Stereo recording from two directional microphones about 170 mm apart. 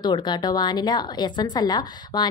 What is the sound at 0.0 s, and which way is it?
A woman's voice, 25° left (ahead or behind).